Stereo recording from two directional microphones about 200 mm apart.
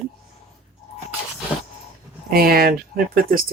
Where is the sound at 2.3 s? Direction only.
50° right (ahead or behind).